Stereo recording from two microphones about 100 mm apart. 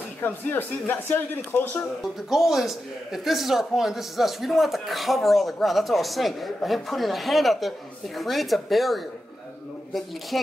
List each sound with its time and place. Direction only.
0.2 s speech: 20° left (ahead or behind)
2.2 s a man's voice: 5° right (ahead or behind)
10.3 s a man's voice: centre (ahead or behind)